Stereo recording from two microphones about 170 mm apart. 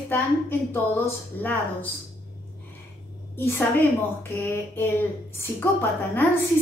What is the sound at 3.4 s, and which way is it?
A woman's voice, 10° left (ahead or behind).